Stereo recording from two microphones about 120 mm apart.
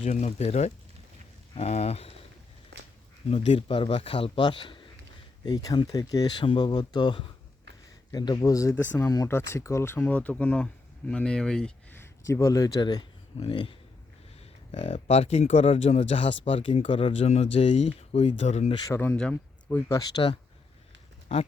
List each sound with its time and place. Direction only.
0.0 s speech: 70° left (ahead or behind)
3.2 s a man's voice: 55° left (ahead or behind); by 6.3 s 30° left (ahead or behind)
6.4 s speech: 40° left (ahead or behind)
8.7 s a man's voice: 15° left (ahead or behind); by 13.7 s 45° left (ahead or behind)
14.7 s speech: 55° left (ahead or behind); by 18.7 s 75° left (ahead or behind)
18.9 s speech: 20° left (ahead or behind)
19.1 s speech: 5° left (ahead or behind)
19.9 s speech: 30° left (ahead or behind)